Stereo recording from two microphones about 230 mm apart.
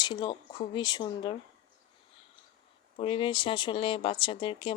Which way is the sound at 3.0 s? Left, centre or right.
Left.